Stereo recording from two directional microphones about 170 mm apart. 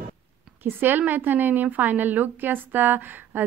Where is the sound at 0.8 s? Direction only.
10° right (ahead or behind).